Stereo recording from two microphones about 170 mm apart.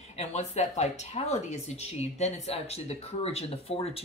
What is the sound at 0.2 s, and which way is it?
Speech, 40° left (ahead or behind).